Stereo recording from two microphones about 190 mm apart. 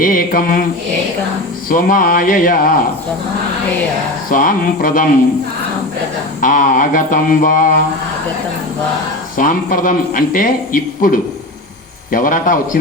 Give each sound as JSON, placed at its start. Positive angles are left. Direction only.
{"t": 0.0, "sound": "a man's voice", "side_deg": 50}
{"t": 1.7, "sound": "a man's voice", "side_deg": 45}
{"t": 4.3, "sound": "a man's voice", "side_deg": 45}
{"t": 6.4, "sound": "a man's voice", "side_deg": 45}
{"t": 9.4, "sound": "a man's voice", "side_deg": 45}